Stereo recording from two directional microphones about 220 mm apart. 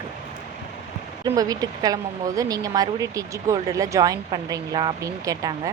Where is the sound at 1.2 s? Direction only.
15° right (ahead or behind).